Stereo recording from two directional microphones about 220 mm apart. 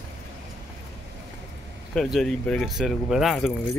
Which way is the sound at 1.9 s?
Centre (ahead or behind).